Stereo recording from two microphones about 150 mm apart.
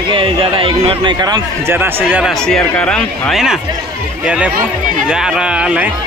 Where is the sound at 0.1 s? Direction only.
35° right (ahead or behind).